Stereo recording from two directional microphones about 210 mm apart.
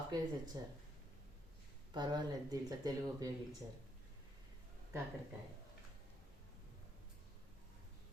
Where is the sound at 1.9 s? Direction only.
20° right (ahead or behind).